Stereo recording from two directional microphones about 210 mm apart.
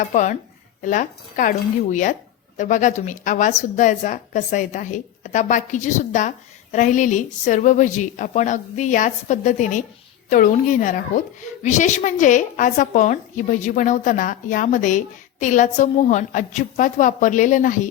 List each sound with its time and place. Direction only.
0.1 s a woman's voice: 35° left (ahead or behind)